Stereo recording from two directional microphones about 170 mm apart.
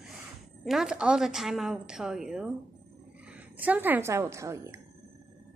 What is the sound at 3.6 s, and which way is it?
A woman's voice, 10° right (ahead or behind).